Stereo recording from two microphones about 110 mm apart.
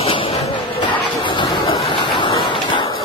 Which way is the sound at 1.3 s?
50° left (ahead or behind).